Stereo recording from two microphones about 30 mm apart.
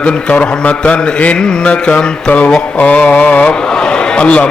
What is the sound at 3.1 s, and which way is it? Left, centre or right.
Mantra, left.